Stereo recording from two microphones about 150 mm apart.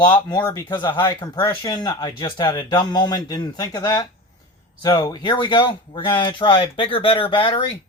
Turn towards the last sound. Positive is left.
turn(degrees=35)  # may be behind; listen again after turning